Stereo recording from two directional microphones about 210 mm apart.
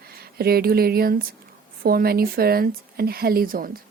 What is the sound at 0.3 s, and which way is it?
Speech, 45° right (ahead or behind).